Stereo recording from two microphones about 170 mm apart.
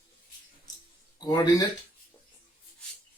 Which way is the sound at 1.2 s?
25° left (ahead or behind).